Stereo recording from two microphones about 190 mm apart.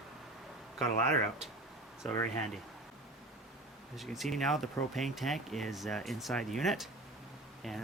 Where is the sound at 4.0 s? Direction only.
Centre (ahead or behind).